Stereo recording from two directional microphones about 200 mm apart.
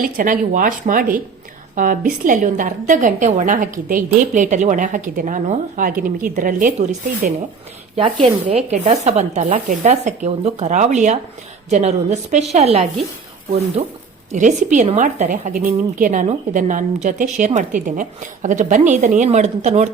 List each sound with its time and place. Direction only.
0.0 s a woman's voice: 40° right (ahead or behind)